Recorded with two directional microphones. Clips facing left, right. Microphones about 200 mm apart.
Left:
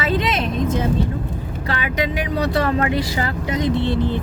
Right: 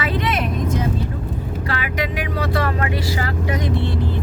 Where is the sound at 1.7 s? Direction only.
25° left (ahead or behind).